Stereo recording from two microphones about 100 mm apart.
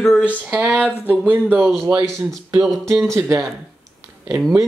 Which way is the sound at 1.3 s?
20° right (ahead or behind).